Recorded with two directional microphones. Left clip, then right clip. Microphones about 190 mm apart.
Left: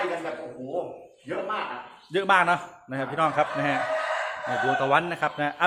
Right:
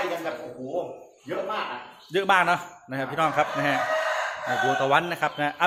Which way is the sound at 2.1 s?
Centre (ahead or behind).